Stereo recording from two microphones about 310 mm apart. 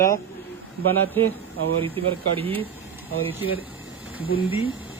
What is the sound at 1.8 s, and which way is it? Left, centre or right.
Speech, centre.